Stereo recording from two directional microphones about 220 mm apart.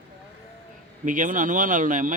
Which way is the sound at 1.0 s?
35° right (ahead or behind).